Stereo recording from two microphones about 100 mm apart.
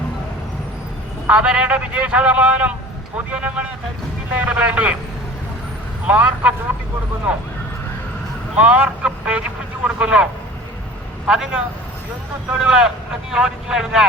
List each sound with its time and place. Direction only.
1.3 s a man's voice: 10° right (ahead or behind)
6.1 s a man's voice: 15° right (ahead or behind)
8.5 s a man's voice: 15° right (ahead or behind)
11.3 s a man's voice: 5° right (ahead or behind)